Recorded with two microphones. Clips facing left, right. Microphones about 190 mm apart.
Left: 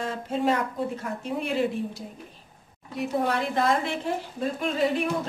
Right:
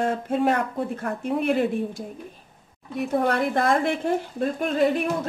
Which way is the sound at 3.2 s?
55° right (ahead or behind).